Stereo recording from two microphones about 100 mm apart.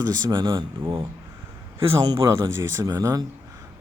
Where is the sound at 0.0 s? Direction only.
40° right (ahead or behind).